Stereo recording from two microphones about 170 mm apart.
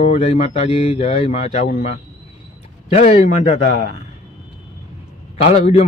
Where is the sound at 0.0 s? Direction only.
40° left (ahead or behind).